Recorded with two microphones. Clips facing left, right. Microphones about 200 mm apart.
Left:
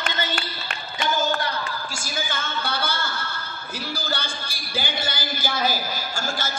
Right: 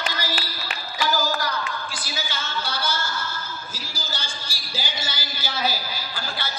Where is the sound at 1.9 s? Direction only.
50° left (ahead or behind).